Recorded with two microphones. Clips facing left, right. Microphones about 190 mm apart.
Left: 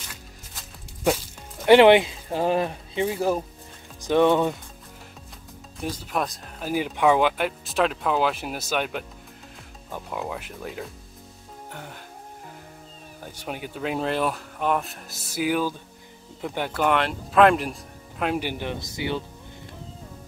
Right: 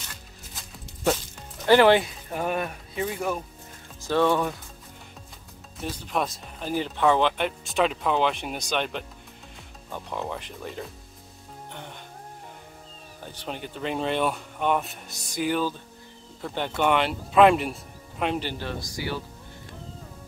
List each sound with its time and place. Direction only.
0.1 s music: 10° left (ahead or behind)
1.7 s speech: 20° left (ahead or behind)
4.0 s speech: 20° left (ahead or behind)
5.8 s speech: centre (ahead or behind)
13.2 s speech: 10° left (ahead or behind)